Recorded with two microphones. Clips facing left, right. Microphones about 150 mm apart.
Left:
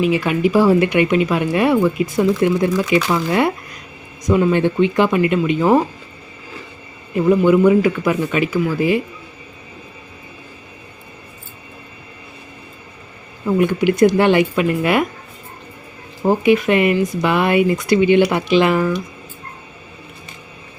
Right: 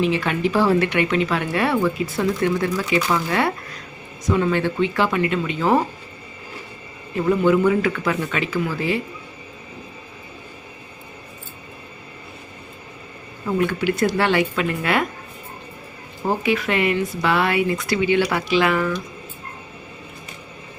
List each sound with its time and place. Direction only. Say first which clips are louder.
0.0 s speech: left 4 dB; 10° left (ahead or behind)
4.3 s speech: left 5 dB; 15° left (ahead or behind)
7.3 s speech: left 5 dB; 15° left (ahead or behind)
13.6 s speech: left 7 dB; 15° left (ahead or behind)
16.2 s speech: left 7 dB; 15° left (ahead or behind)